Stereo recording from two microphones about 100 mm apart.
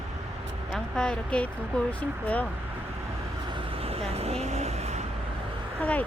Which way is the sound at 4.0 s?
85° right.